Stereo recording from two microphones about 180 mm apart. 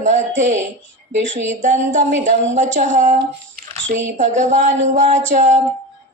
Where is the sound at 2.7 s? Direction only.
45° right (ahead or behind).